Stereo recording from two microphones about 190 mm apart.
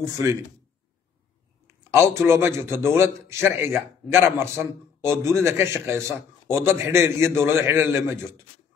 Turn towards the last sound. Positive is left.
turn(degrees=-15)  # may be behind; listen again after turning